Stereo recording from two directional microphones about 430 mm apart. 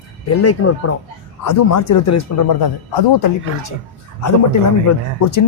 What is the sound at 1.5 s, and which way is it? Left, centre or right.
Speech, left.